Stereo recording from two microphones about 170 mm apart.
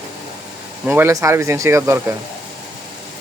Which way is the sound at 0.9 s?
15° right (ahead or behind).